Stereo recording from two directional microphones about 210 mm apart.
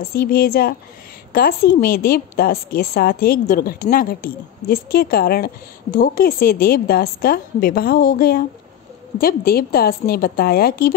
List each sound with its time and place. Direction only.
0.1 s a woman's voice: 45° left (ahead or behind)